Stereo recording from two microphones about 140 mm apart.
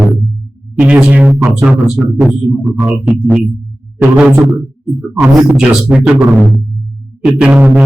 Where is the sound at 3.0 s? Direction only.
10° right (ahead or behind).